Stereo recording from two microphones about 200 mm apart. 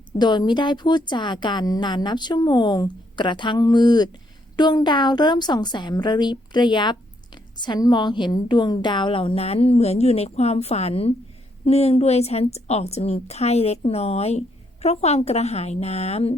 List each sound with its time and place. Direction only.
0.2 s a woman's voice: 20° left (ahead or behind)